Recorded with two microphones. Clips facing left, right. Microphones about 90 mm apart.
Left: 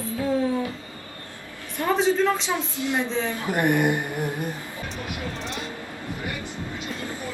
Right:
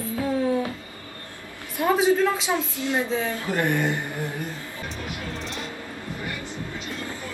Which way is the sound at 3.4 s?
20° left (ahead or behind).